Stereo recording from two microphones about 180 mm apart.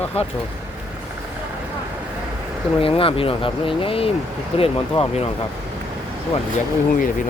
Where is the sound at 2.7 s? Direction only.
30° left (ahead or behind).